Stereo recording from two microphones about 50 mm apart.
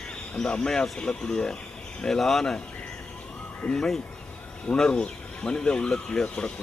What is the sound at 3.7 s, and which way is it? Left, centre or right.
Speech, centre.